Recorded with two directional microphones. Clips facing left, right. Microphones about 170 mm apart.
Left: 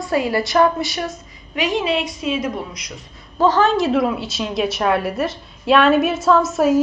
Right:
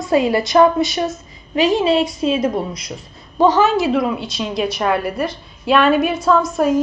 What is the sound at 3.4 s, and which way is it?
A woman's voice, 10° right (ahead or behind).